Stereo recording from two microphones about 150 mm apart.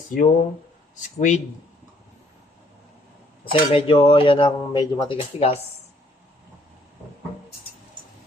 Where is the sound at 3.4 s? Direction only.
35° left (ahead or behind).